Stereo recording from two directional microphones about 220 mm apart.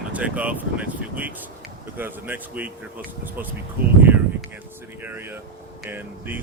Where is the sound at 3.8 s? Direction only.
10° right (ahead or behind).